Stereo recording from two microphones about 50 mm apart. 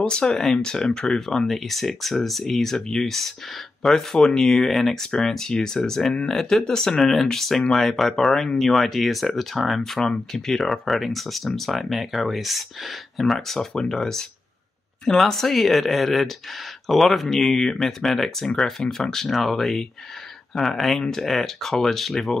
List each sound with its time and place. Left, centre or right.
0.0 s speech: centre